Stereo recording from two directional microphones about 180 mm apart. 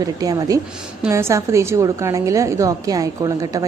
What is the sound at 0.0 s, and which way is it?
A woman's voice, 20° right (ahead or behind).